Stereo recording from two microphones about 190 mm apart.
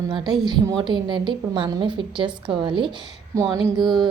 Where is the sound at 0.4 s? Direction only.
25° right (ahead or behind).